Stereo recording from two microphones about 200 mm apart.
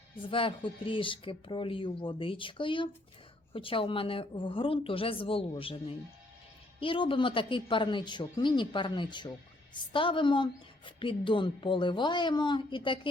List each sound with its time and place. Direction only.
0.3 s a woman's voice: 25° left (ahead or behind)